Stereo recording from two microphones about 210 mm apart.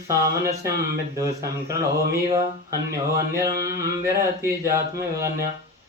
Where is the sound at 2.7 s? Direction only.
15° right (ahead or behind).